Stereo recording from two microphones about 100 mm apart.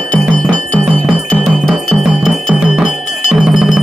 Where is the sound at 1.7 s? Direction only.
Centre (ahead or behind).